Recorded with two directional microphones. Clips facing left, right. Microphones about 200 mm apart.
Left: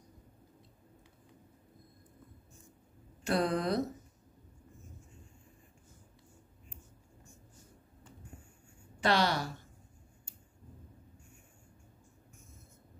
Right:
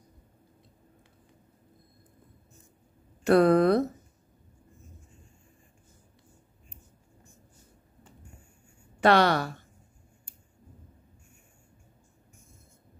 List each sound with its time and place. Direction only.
3.3 s speech: 60° right (ahead or behind)
9.0 s speech: 60° right (ahead or behind)